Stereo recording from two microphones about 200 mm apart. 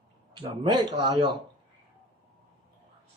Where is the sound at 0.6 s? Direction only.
25° right (ahead or behind).